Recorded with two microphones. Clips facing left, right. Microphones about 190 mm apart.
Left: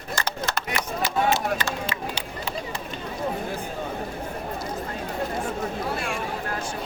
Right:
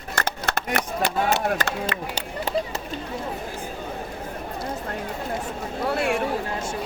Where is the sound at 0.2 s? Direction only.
55° right (ahead or behind).